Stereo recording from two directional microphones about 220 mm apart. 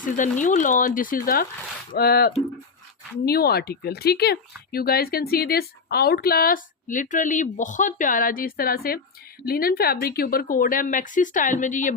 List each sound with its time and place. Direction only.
0.0 s a woman's voice: 35° left (ahead or behind)